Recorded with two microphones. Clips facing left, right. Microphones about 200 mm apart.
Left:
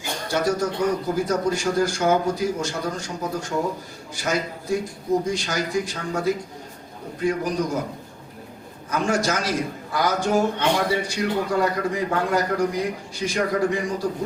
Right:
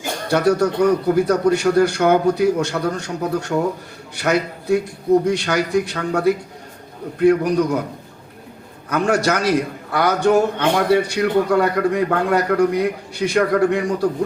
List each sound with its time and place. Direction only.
0.3 s a man's voice: 65° right (ahead or behind)
8.9 s a man's voice: 65° right (ahead or behind)